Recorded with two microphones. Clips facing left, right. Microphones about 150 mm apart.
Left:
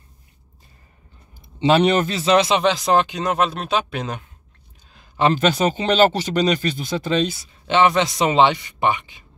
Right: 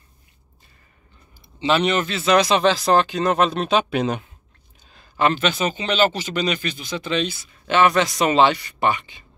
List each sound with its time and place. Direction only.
1.8 s a man's voice: 40° left (ahead or behind); by 3.3 s 15° left (ahead or behind)
3.3 s speech: 5° left (ahead or behind)
5.3 s speech: 40° left (ahead or behind)
7.6 s a man's voice: 20° left (ahead or behind)